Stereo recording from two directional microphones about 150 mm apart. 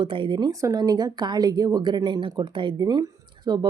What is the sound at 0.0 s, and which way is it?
Speech, 35° right (ahead or behind).